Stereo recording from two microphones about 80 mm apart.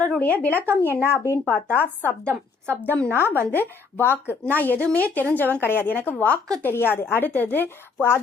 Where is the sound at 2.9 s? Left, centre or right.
Left.